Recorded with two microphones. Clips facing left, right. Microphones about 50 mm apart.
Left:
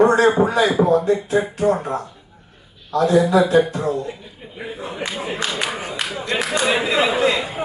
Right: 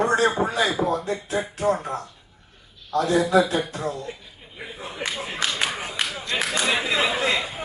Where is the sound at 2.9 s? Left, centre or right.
Left.